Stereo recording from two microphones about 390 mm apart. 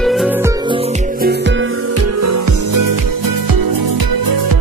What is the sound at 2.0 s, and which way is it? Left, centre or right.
Music, right.